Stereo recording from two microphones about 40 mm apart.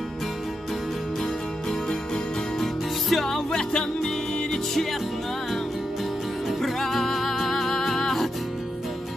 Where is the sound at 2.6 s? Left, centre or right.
Centre.